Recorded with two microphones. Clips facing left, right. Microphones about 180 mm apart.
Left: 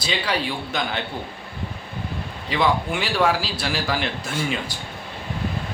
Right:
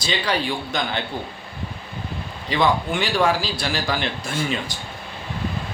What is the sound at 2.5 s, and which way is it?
A man's voice, 5° left (ahead or behind).